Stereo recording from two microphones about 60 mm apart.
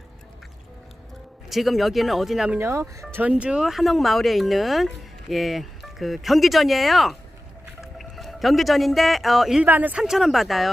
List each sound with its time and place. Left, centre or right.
1.5 s speech: centre
2.6 s speech: right
3.2 s speech: right
3.7 s speech: centre
9.6 s speech: right
9.9 s speech: centre